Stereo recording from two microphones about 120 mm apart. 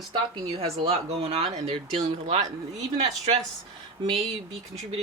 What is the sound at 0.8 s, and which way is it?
Speech, 55° right (ahead or behind).